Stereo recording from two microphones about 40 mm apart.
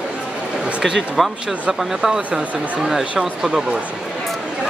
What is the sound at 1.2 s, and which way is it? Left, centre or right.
Speech, centre.